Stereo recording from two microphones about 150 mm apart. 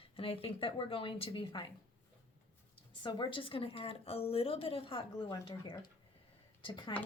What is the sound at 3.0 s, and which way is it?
Speech, 35° left (ahead or behind).